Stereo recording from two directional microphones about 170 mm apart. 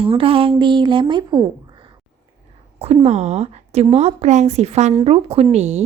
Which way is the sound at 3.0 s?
40° right (ahead or behind).